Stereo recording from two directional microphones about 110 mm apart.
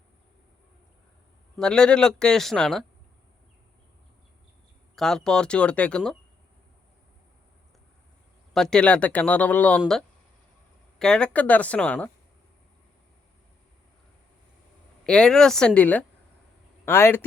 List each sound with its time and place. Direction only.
1.5 s speech: 10° left (ahead or behind)
4.9 s speech: 5° left (ahead or behind)
8.5 s speech: 5° left (ahead or behind)
11.0 s speech: 10° left (ahead or behind)
15.0 s speech: 5° left (ahead or behind)